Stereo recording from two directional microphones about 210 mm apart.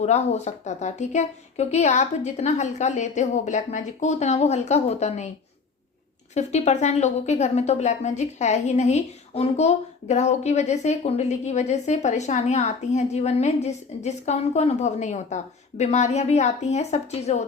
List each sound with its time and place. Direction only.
0.0 s speech: 30° left (ahead or behind)
6.3 s speech: 30° left (ahead or behind)